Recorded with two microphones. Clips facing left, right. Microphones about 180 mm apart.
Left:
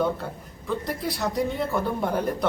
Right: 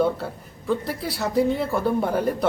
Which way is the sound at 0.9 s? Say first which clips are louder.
Right 1 dB; 5° right (ahead or behind).